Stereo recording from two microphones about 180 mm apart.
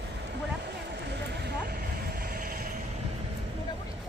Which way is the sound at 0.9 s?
65° right (ahead or behind).